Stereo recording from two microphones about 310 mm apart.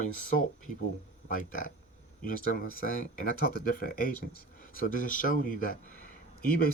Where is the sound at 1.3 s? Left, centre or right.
Left.